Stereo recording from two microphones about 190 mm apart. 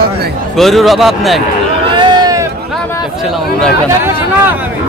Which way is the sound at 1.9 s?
20° right (ahead or behind).